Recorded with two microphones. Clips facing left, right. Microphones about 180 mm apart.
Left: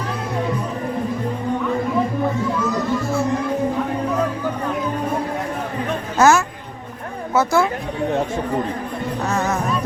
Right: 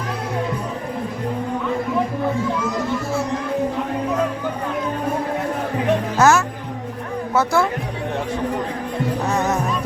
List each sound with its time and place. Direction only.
6.1 s music: centre (ahead or behind)
7.3 s speech: centre (ahead or behind)
9.3 s music: 15° right (ahead or behind)